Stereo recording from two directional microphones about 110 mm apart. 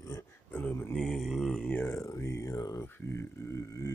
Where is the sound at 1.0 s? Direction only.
Centre (ahead or behind); by 3.9 s 25° left (ahead or behind).